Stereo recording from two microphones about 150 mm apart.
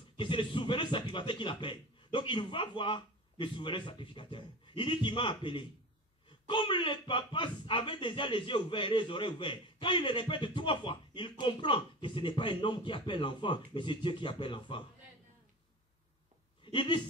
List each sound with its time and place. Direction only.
0.2 s speech: 35° left (ahead or behind)
16.7 s speech: 35° left (ahead or behind)